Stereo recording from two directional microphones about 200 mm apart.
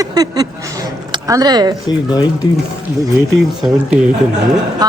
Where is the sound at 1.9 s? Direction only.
20° left (ahead or behind).